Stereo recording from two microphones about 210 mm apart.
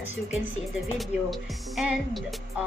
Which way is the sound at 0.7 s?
Centre (ahead or behind).